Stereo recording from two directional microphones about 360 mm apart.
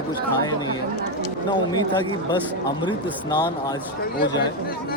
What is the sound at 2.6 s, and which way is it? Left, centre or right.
Speech, centre.